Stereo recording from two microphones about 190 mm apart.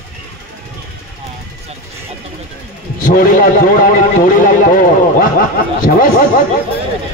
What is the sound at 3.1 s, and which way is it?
Speech, 45° left (ahead or behind).